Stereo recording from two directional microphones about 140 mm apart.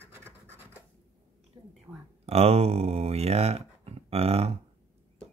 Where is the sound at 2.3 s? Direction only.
45° right (ahead or behind).